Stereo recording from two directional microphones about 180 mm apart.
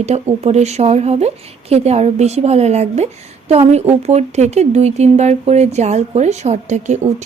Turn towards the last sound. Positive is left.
turn(degrees=-40)  # may be behind; listen again after turning